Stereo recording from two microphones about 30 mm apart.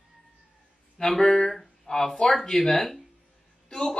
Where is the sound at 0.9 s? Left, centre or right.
Centre.